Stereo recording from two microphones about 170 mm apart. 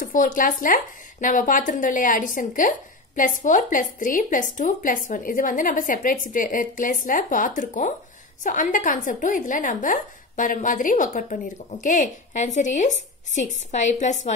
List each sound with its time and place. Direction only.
0.0 s a woman's voice: 50° left (ahead or behind)